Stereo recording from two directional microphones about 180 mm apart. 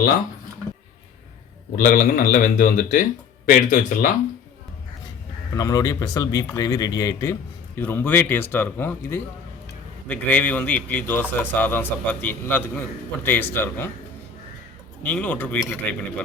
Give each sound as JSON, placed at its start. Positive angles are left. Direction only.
{"t": 1.7, "sound": "speech", "side_deg": 50}
{"t": 5.5, "sound": "speech", "side_deg": 20}
{"t": 15.0, "sound": "speech", "side_deg": 10}